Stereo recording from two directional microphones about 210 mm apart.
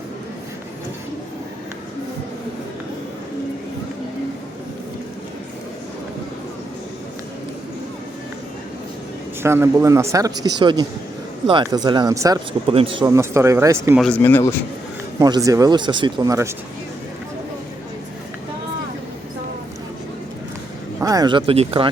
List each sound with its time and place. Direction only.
9.4 s speech: 10° right (ahead or behind)
14.0 s speech: 10° left (ahead or behind)
15.2 s speech: 15° right (ahead or behind)
21.0 s speech: 15° right (ahead or behind)